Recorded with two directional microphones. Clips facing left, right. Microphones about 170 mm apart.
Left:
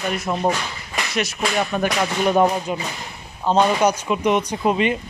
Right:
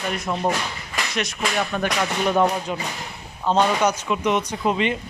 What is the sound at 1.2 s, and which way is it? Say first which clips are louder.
Speech: left 3 dB; 5° left (ahead or behind).